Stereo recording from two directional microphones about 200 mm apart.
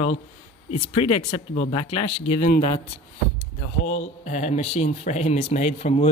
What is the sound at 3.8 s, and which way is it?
Speech, 35° left (ahead or behind).